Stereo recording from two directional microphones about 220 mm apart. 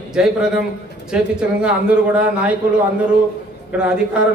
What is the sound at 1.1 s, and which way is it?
A man's voice, 5° right (ahead or behind).